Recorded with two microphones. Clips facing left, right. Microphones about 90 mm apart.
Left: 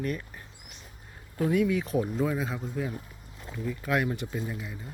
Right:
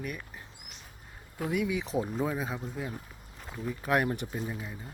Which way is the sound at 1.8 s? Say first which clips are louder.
Left 3 dB; 20° right (ahead or behind).